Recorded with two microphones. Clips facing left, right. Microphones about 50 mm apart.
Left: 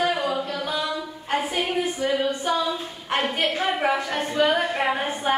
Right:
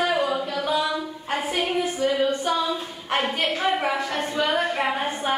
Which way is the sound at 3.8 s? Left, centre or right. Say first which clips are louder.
Left 1 dB; centre.